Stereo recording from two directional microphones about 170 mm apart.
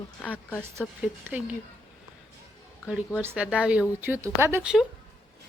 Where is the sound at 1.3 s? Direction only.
10° right (ahead or behind).